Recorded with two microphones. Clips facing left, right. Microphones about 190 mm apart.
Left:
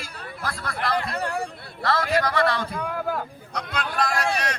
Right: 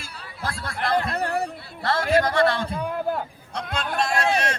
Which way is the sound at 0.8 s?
50° right (ahead or behind).